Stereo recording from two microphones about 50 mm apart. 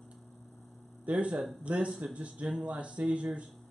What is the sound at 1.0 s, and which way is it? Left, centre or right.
Speech, right.